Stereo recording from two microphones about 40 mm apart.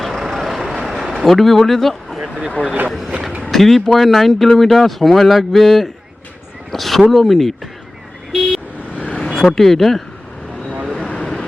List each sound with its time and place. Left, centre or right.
0.0 s vehicle: centre
1.1 s speech: centre
3.5 s speech: centre
6.7 s a sound: centre
7.1 s speech: centre
8.3 s vehicle: centre
8.9 s vehicle: left
9.1 s vehicle: centre
9.6 s speech: centre